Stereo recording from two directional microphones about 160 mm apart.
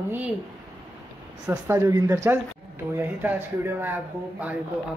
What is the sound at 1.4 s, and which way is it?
Speech, 20° right (ahead or behind).